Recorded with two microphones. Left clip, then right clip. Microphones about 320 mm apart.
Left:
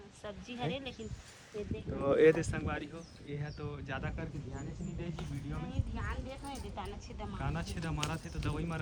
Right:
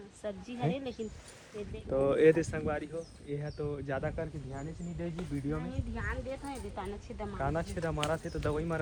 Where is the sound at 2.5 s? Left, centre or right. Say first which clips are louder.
Right 4 dB; centre.